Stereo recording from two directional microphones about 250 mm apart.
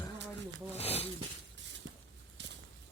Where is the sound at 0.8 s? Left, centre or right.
Left.